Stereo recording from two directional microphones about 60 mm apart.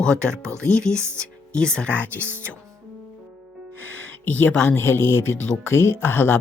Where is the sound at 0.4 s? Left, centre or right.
Right.